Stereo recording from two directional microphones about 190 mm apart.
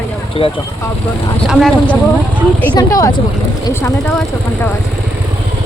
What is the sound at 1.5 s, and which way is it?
Speech, centre (ahead or behind).